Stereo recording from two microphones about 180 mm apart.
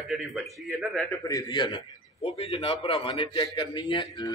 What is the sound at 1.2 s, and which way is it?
A man's voice, 20° left (ahead or behind).